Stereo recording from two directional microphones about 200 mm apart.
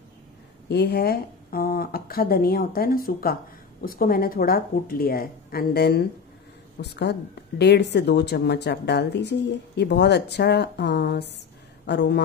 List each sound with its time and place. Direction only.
0.7 s a woman's voice: 55° left (ahead or behind)